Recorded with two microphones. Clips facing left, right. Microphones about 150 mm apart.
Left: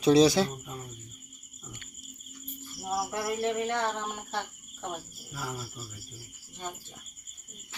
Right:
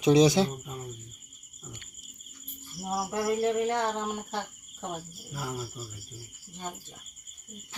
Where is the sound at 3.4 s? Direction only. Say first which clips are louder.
Right 1 dB; 35° right (ahead or behind).